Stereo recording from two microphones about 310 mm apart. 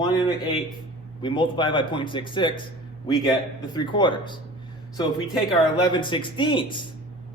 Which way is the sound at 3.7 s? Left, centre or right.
Centre.